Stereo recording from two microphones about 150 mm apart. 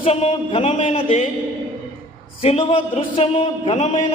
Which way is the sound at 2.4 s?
40° left (ahead or behind).